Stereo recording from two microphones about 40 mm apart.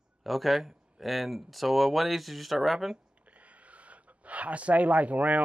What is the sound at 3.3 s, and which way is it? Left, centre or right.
Speech, right.